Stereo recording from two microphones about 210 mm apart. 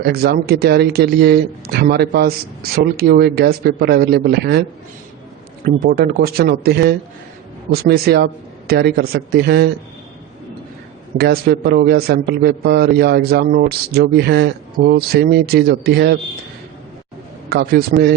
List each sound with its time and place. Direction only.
0.0 s a man's voice: 45° right (ahead or behind)
5.6 s a man's voice: 45° right (ahead or behind)
11.2 s a man's voice: 50° right (ahead or behind)
17.5 s a man's voice: 50° right (ahead or behind)